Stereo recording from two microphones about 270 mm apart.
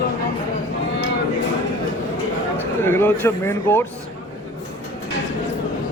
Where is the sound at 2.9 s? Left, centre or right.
Centre.